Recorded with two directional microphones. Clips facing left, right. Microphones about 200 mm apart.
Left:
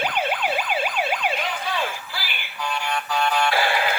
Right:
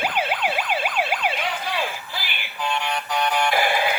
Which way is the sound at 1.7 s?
20° right (ahead or behind).